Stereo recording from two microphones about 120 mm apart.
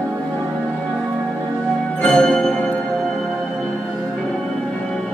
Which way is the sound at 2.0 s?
5° left (ahead or behind).